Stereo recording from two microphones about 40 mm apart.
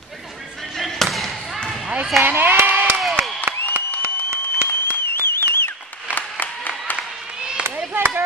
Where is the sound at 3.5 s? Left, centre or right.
Right.